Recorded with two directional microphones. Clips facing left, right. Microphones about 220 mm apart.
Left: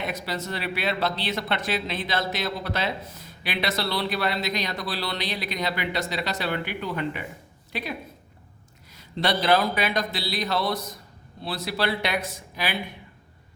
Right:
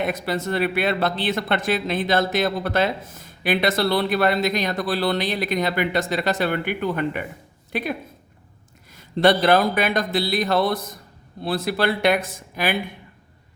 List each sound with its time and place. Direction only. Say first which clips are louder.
0.0 s speech: right 6 dB; 55° right (ahead or behind)
9.0 s speech: right 8 dB; 50° right (ahead or behind)